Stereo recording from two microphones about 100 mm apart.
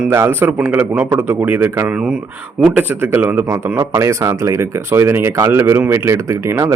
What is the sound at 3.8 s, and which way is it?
Speech, 30° right (ahead or behind).